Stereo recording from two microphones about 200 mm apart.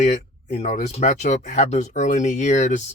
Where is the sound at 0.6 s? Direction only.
35° left (ahead or behind).